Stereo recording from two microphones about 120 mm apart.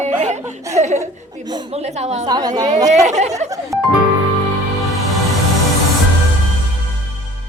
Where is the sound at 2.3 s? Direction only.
30° right (ahead or behind).